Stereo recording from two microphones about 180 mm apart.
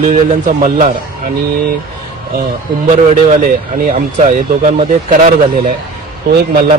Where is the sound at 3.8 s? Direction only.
45° right (ahead or behind).